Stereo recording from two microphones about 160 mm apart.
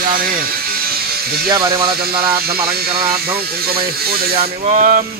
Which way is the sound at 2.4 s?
75° right (ahead or behind).